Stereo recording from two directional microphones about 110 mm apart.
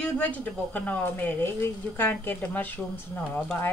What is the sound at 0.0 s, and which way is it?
Speech, 15° left (ahead or behind).